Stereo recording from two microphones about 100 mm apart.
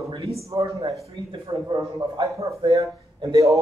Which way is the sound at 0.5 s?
30° right (ahead or behind).